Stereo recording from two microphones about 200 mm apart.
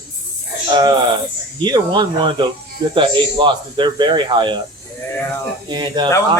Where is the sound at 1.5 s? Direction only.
20° right (ahead or behind).